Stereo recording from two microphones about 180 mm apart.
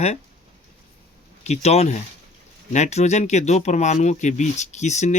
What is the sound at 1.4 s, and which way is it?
Speech, 40° left (ahead or behind).